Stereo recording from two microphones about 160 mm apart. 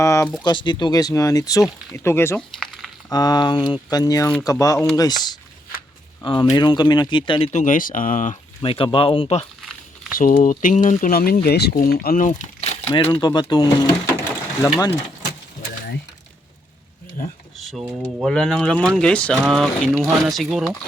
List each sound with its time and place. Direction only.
0.0 s speech: 20° left (ahead or behind)
0.4 s speech: 30° left (ahead or behind)
7.5 s speech: 55° left (ahead or behind)
8.6 s speech: 35° left (ahead or behind)
10.2 s speech: 55° left (ahead or behind)
11.4 s speech: 85° left; by 12.4 s 60° left (ahead or behind)
12.5 s crumpling: 40° left (ahead or behind)
13.0 s speech: 30° left (ahead or behind)
17.8 s speech: 10° right (ahead or behind)